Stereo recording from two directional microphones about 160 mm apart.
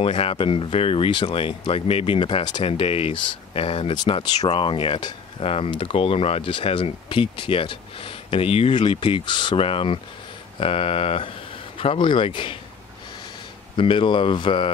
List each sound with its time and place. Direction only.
0.0 s speech: 35° left (ahead or behind)
13.7 s speech: 30° left (ahead or behind)